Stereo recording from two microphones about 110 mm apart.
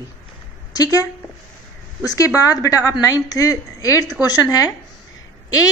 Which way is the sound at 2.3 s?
30° left (ahead or behind).